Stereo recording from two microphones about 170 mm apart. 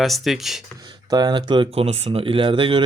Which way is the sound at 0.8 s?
25° right (ahead or behind).